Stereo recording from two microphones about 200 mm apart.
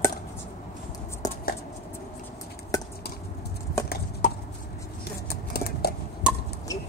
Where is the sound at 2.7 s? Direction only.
15° left (ahead or behind).